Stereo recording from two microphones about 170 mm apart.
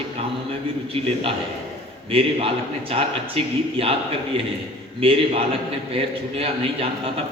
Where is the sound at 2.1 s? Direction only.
35° right (ahead or behind).